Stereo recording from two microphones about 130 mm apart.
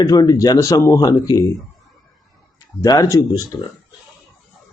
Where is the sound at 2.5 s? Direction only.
30° left (ahead or behind).